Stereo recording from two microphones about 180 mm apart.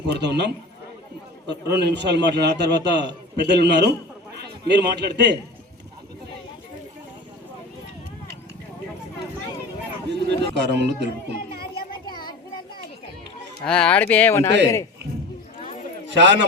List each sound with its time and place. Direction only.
0.1 s a man's voice: 70° right (ahead or behind)
10.1 s run: 70° right (ahead or behind)
12.0 s a sound: 25° left (ahead or behind)
13.7 s speech: 5° left (ahead or behind)
16.1 s a man's voice: 75° right (ahead or behind)